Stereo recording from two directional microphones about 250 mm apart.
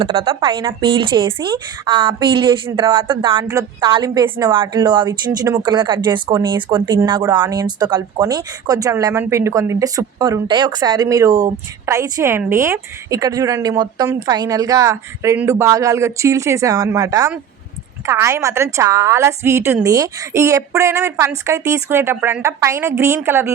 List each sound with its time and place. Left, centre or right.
0.0 s a woman's voice: right